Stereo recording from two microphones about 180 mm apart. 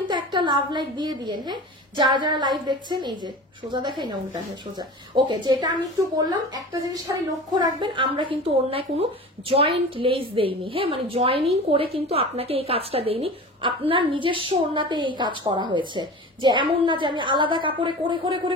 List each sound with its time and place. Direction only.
0.1 s a woman's voice: 25° right (ahead or behind)